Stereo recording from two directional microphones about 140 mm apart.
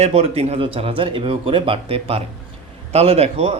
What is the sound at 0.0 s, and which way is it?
Speech, 45° right (ahead or behind).